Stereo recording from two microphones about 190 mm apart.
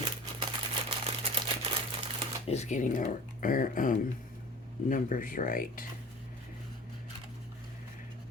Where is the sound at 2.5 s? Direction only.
35° left (ahead or behind).